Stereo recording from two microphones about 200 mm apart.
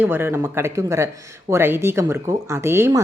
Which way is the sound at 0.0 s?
10° right (ahead or behind).